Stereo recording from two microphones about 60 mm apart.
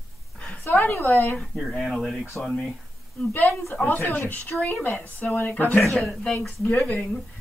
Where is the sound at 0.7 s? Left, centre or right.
Left.